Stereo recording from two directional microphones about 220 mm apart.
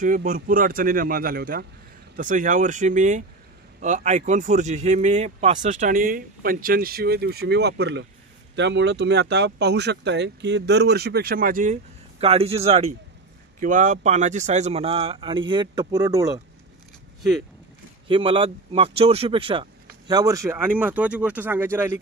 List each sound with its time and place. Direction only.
0.0 s speech: 35° right (ahead or behind); by 16.3 s 15° right (ahead or behind)
18.0 s speech: 20° right (ahead or behind)